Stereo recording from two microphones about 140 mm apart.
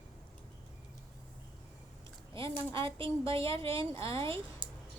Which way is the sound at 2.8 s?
40° right (ahead or behind).